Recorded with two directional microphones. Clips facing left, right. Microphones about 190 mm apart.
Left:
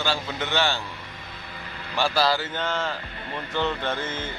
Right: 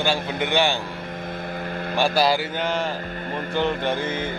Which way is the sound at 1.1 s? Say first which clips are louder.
Right 11 dB; 50° right (ahead or behind).